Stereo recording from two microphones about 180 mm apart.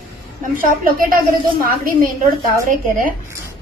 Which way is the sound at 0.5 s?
50° right (ahead or behind).